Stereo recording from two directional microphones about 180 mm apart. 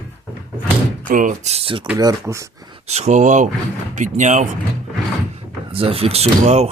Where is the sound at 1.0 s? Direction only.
45° right (ahead or behind); by 1.9 s 30° right (ahead or behind).